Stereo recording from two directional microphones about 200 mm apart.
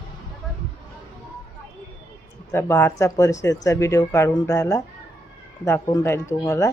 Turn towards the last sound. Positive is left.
turn(degrees=15)  # may be behind; listen again after turning